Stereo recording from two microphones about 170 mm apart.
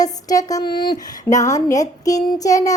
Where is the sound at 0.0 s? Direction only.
20° left (ahead or behind).